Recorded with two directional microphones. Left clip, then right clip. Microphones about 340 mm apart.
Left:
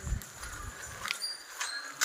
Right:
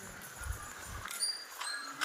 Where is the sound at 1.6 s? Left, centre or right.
Left.